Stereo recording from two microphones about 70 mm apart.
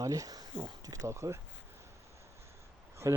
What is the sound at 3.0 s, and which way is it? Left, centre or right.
Speech, right.